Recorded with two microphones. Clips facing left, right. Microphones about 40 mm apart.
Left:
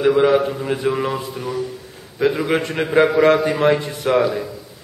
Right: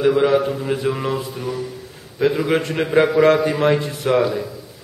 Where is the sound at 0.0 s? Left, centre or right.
Centre.